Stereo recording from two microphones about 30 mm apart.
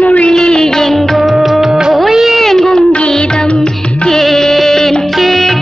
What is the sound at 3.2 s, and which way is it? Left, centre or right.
Music, left.